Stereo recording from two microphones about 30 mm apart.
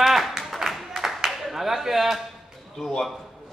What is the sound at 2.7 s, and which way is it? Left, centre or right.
Speech, centre.